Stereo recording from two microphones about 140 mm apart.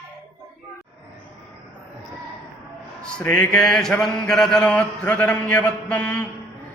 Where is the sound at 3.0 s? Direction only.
5° left (ahead or behind).